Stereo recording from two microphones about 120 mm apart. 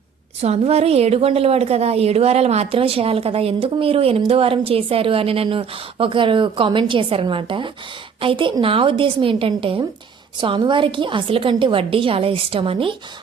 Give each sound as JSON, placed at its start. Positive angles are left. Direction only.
{"t": 0.4, "sound": "a woman's voice", "side_deg": -60}